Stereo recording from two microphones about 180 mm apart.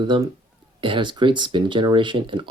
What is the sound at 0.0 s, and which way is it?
Speech, 25° right (ahead or behind).